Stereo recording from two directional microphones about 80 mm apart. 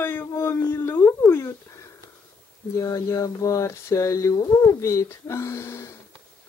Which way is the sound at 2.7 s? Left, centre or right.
Left.